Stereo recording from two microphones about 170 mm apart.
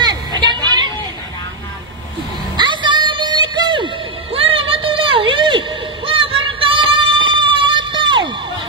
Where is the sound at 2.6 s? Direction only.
25° right (ahead or behind).